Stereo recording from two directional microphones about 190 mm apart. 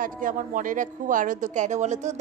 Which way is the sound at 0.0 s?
45° right (ahead or behind).